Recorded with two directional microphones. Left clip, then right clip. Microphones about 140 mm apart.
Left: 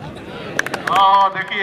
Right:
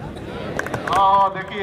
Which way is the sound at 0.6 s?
45° left (ahead or behind).